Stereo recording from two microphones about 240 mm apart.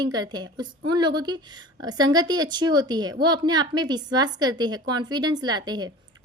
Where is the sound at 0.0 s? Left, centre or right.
Centre.